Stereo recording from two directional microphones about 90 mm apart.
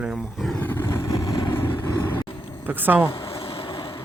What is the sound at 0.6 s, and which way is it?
Vehicle, 20° left (ahead or behind).